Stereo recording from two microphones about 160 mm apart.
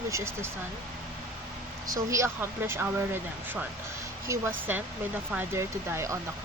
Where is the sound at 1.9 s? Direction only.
20° right (ahead or behind).